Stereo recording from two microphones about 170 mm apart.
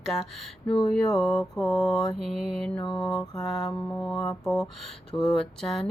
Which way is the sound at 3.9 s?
Centre (ahead or behind).